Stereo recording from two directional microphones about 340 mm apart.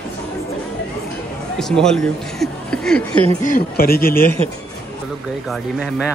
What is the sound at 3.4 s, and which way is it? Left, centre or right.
Speech, left.